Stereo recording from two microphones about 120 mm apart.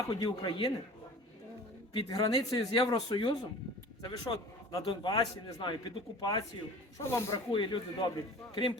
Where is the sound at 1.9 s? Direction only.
40° left (ahead or behind).